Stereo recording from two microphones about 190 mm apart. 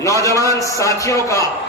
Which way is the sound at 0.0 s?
15° left (ahead or behind).